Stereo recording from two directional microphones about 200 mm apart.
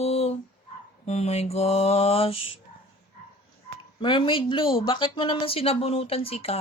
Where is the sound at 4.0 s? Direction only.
25° left (ahead or behind).